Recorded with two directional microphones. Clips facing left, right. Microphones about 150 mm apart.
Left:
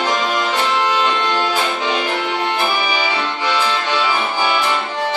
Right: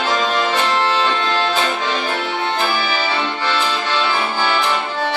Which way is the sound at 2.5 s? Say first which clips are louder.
Left 1 dB; 15° left (ahead or behind).